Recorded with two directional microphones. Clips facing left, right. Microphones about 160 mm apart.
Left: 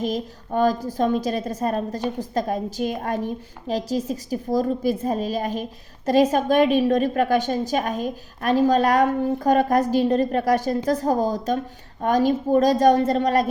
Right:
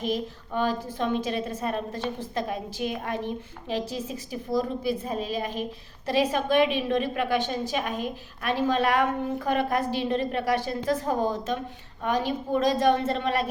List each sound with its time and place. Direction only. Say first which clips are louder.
0.0 s a woman's voice: left 3 dB; 40° left (ahead or behind)